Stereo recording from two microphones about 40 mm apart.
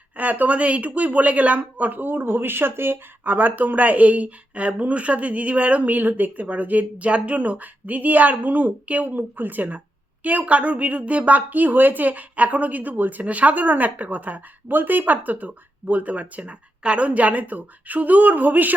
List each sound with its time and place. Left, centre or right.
0.2 s speech: right
1.9 s speech: right
3.2 s a woman's voice: right